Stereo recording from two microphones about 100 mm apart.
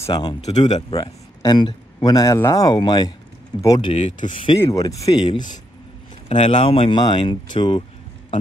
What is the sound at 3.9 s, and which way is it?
Speech, 65° left (ahead or behind).